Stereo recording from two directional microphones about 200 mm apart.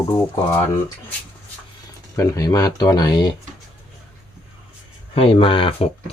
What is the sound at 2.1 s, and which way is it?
Speech, 15° left (ahead or behind).